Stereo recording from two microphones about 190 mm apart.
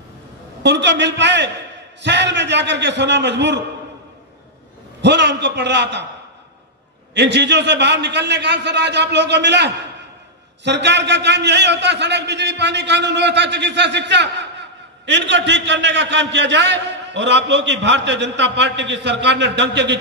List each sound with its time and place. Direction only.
0.6 s a man's voice: 65° right (ahead or behind)
5.0 s a man's voice: 65° right (ahead or behind)
7.2 s a man's voice: 65° right (ahead or behind)